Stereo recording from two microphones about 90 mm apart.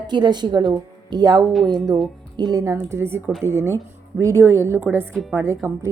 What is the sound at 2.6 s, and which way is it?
A woman's voice, 35° right (ahead or behind).